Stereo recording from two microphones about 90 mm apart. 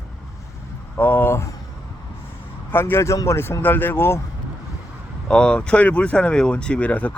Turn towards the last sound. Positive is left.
turn(degrees=15)  # may be behind; listen again after turning